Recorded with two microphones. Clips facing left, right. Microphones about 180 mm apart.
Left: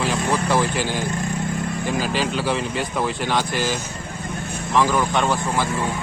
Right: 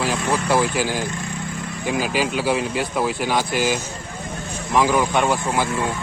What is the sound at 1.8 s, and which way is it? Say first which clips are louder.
Speech: right 3 dB; 10° right (ahead or behind).